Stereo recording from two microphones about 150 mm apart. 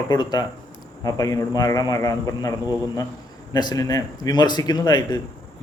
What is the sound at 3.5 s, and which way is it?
A man's voice, 25° left (ahead or behind).